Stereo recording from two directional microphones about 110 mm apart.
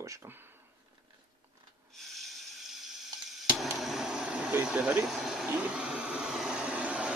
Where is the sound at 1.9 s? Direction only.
Centre (ahead or behind).